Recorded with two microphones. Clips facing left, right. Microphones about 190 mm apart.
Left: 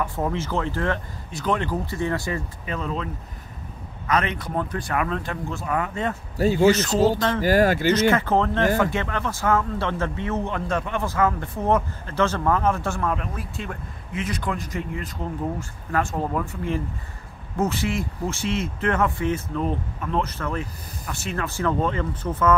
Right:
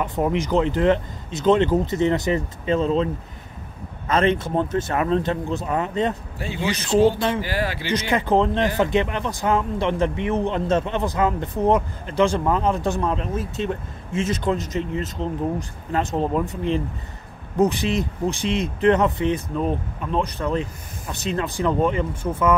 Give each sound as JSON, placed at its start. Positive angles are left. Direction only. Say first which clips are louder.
{"t": 0.0, "sound": "a man's voice", "louder": "right 4 dB", "side_deg": -20}
{"t": 4.1, "sound": "a man's voice", "louder": "right 5 dB", "side_deg": -25}
{"t": 6.3, "sound": "speech", "louder": "left 10 dB", "side_deg": 40}
{"t": 7.0, "sound": "speech", "louder": "right 2 dB", "side_deg": -15}
{"t": 7.4, "sound": "speech", "louder": "left 8 dB", "side_deg": 45}
{"t": 7.9, "sound": "a man's voice", "louder": "left 1 dB", "side_deg": -15}